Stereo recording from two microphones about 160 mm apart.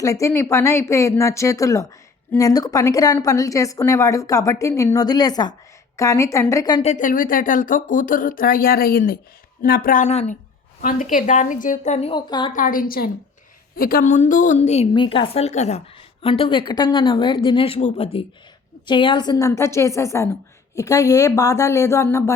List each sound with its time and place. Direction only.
0.0 s a woman's voice: 20° left (ahead or behind)
6.8 s speech: 55° left (ahead or behind)
10.1 s a woman's voice: 45° left (ahead or behind)
10.8 s a woman's voice: 55° left (ahead or behind); by 12.2 s 40° left (ahead or behind)
12.5 s a woman's voice: 60° left (ahead or behind)
14.9 s a woman's voice: 30° left (ahead or behind)